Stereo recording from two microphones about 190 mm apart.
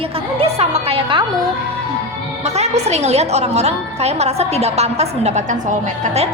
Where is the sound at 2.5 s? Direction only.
35° right (ahead or behind).